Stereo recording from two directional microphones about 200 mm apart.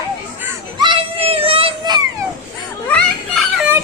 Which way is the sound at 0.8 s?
25° right (ahead or behind).